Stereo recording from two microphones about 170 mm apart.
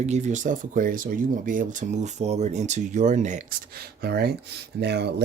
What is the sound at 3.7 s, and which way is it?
Speech, 65° right (ahead or behind).